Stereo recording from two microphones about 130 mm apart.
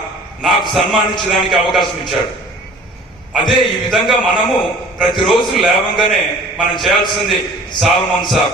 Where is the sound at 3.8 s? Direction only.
Centre (ahead or behind).